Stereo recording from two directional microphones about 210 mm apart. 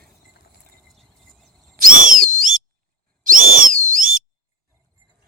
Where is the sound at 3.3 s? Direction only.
40° right (ahead or behind).